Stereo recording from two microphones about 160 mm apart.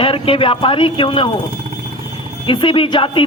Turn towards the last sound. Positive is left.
turn(degrees=30)  # may be behind; listen again after turning